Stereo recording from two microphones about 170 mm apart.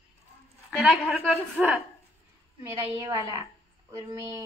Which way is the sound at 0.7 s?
Centre (ahead or behind).